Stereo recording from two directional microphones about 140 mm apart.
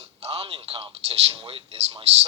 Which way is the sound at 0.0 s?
45° right (ahead or behind).